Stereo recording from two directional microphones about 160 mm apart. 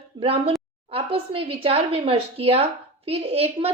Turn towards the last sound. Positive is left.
turn(degrees=-40)  # may be behind; listen again after turning